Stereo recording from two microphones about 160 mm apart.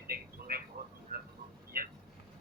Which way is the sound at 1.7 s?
65° right (ahead or behind).